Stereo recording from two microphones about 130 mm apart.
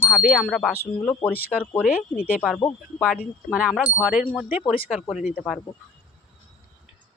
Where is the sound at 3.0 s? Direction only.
5° right (ahead or behind).